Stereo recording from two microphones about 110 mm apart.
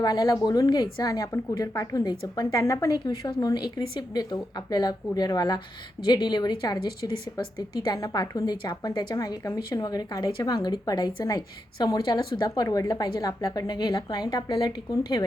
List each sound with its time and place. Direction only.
0.0 s a woman's voice: 35° left (ahead or behind)